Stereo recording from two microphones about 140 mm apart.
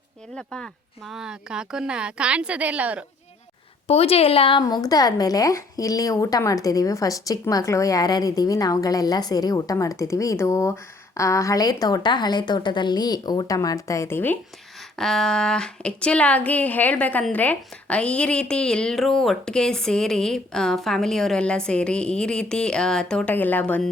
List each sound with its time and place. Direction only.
0.3 s speech: 5° left (ahead or behind); by 3.0 s 10° right (ahead or behind)
3.8 s speech: 45° left (ahead or behind)
4.6 s a woman's voice: 25° left (ahead or behind)
14.9 s speech: 5° left (ahead or behind)